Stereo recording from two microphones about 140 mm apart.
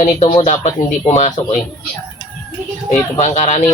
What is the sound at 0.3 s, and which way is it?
Speech, 50° left (ahead or behind).